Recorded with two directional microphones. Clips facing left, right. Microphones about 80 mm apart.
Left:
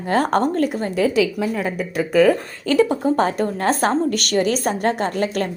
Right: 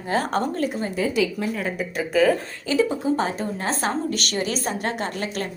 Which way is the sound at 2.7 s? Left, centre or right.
Left.